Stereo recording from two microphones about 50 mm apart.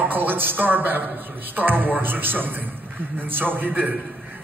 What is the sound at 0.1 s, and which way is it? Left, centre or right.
A woman's voice, right.